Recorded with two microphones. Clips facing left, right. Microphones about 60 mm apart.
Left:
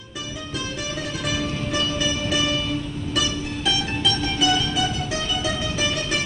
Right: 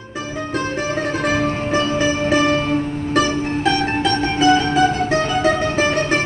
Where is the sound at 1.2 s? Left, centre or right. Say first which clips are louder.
Right 6 dB; right.